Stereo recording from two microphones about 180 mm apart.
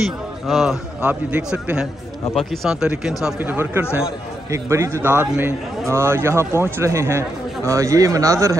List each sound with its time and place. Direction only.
0.0 s a man's voice: centre (ahead or behind); by 8.5 s 20° right (ahead or behind)